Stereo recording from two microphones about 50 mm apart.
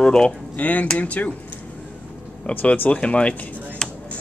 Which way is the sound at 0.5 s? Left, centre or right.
Left.